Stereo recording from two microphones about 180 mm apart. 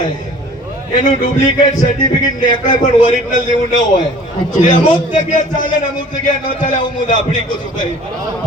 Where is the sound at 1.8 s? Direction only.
45° left (ahead or behind).